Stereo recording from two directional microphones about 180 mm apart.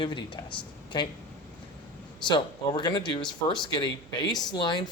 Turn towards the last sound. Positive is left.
turn(degrees=25)  # may be behind; listen again after turning